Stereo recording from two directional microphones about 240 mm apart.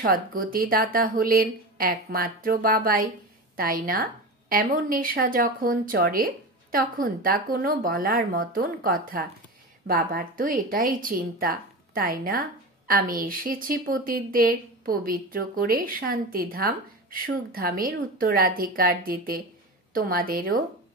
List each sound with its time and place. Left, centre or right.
0.0 s speech: right